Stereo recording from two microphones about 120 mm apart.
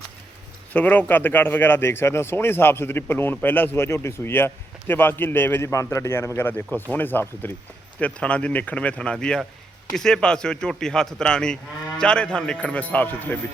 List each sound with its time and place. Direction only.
0.7 s a man's voice: 15° left (ahead or behind)